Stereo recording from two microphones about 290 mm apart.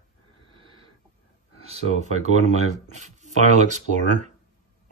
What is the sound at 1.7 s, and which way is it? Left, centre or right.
Speech, right.